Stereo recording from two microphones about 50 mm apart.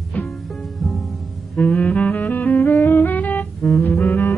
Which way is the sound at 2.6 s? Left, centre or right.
Left.